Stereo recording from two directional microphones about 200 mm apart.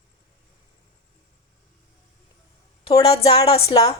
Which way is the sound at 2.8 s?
25° left (ahead or behind).